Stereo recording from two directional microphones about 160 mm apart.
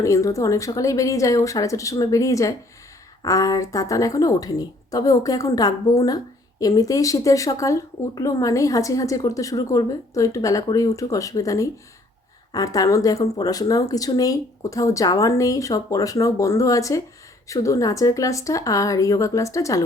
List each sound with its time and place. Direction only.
0.0 s speech: 20° left (ahead or behind)